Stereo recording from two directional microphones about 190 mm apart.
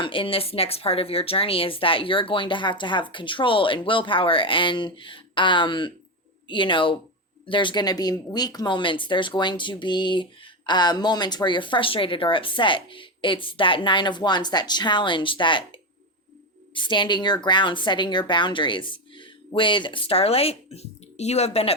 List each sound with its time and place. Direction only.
0.0 s speech: 25° left (ahead or behind)